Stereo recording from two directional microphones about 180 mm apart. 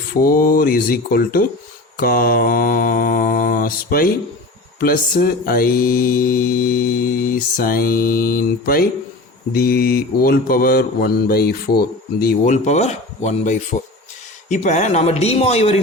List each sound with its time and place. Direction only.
0.1 s speech: 55° left (ahead or behind)
2.0 s mantra: 55° left (ahead or behind)
9.5 s speech: 55° left (ahead or behind)
12.5 s speech: 40° left (ahead or behind)